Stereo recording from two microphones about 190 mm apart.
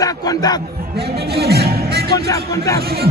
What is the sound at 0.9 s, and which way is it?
Speech, 55° right (ahead or behind).